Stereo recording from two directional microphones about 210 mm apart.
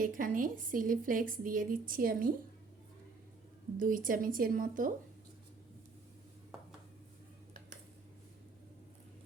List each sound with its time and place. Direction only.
0.0 s a woman's voice: 40° right (ahead or behind)
3.8 s a woman's voice: 40° right (ahead or behind)